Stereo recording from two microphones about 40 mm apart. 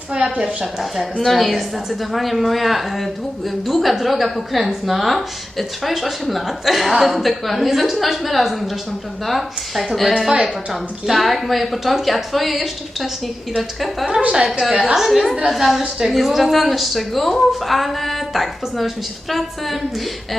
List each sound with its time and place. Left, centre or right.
0.6 s a woman's voice: centre
14.2 s a woman's voice: right
14.6 s a woman's voice: centre